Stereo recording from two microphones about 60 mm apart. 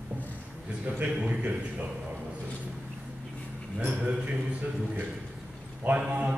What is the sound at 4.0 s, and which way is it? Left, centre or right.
Speech, right.